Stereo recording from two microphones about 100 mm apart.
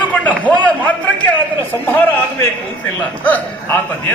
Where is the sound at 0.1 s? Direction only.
15° left (ahead or behind).